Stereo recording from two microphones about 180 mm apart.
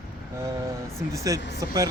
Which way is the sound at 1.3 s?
20° right (ahead or behind).